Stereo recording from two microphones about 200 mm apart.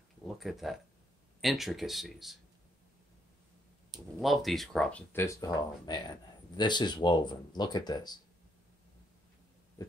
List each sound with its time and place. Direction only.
0.4 s speech: centre (ahead or behind)
4.2 s speech: centre (ahead or behind); by 8.2 s 20° left (ahead or behind)
9.8 s a sound: 20° left (ahead or behind)